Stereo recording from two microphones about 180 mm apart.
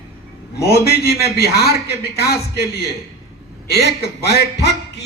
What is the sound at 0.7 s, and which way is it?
A man's voice, 60° left (ahead or behind).